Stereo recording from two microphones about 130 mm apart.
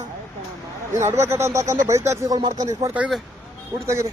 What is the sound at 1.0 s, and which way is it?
Speech, 20° right (ahead or behind).